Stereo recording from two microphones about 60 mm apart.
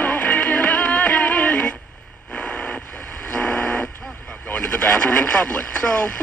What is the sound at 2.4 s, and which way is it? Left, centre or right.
Vehicle, centre.